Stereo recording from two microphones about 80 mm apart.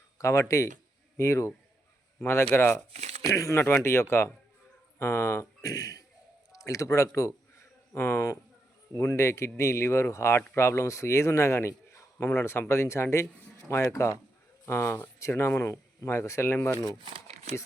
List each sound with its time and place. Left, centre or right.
0.2 s speech: left
2.5 s speech: left
3.2 s speech: left
5.6 s a man's voice: left
7.2 s a sound: left
9.0 s speech: left